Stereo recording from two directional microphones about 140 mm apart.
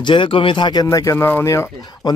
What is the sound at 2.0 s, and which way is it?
Speech, 30° left (ahead or behind).